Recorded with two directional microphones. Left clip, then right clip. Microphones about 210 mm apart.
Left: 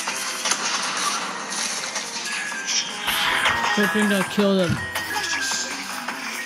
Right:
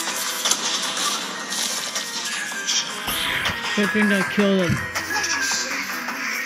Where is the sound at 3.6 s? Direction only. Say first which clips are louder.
Left 2 dB; 40° left (ahead or behind).